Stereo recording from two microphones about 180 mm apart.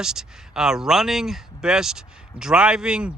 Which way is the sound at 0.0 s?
5° right (ahead or behind).